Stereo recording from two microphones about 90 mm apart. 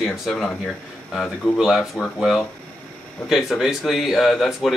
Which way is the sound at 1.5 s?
5° right (ahead or behind).